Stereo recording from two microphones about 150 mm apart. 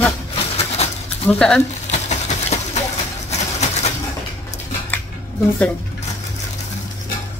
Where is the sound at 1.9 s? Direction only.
50° left (ahead or behind).